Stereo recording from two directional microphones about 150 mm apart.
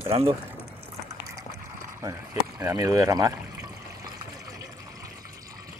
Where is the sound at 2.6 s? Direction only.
25° right (ahead or behind).